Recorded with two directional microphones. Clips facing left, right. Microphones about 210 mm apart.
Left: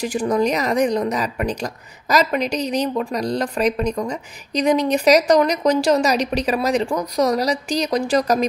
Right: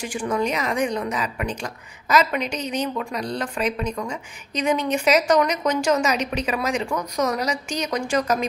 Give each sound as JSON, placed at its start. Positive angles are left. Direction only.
{"t": 0.0, "sound": "speech", "side_deg": 40}